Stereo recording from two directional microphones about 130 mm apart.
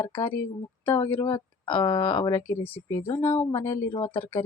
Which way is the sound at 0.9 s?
40° left (ahead or behind).